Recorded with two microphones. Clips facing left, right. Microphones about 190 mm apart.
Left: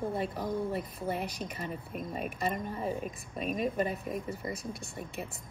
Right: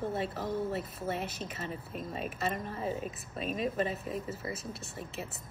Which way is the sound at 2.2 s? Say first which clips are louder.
Left 1 dB; centre (ahead or behind).